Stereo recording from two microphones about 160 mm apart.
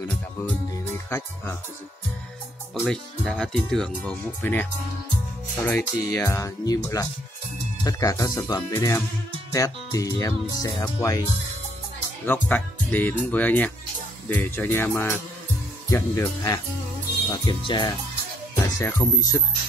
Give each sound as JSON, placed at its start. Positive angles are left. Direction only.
{"t": 1.1, "sound": "speech", "side_deg": 15}
{"t": 2.7, "sound": "speech", "side_deg": 5}
{"t": 12.3, "sound": "speech", "side_deg": 10}